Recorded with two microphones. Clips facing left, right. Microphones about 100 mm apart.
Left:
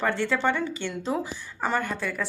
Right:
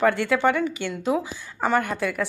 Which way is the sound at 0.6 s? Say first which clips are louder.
Right 4 dB; 30° left (ahead or behind).